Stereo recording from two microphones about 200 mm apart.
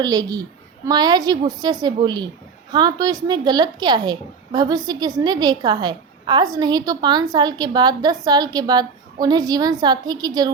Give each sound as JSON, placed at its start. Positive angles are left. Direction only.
{"t": 0.0, "sound": "a woman's voice", "side_deg": -20}